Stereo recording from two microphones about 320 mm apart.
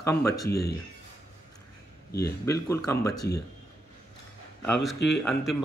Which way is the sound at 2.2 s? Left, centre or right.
Centre.